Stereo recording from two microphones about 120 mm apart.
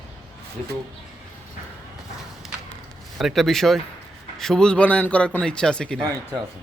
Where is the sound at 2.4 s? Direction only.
Centre (ahead or behind).